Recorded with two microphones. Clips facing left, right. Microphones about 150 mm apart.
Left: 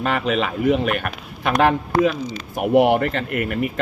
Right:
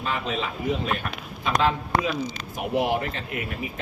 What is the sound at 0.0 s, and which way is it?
A man's voice, 75° left (ahead or behind).